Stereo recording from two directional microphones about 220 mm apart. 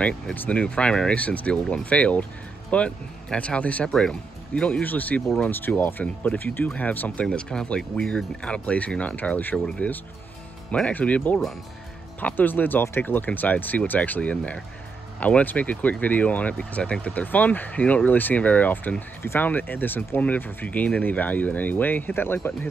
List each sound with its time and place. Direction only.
0.0 s speech: 5° left (ahead or behind)